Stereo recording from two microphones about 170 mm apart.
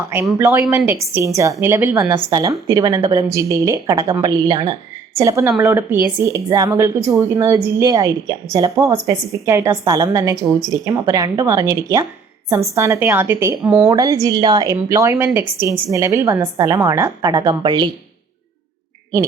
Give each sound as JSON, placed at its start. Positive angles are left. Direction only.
{"t": 0.3, "sound": "a woman's voice", "side_deg": -15}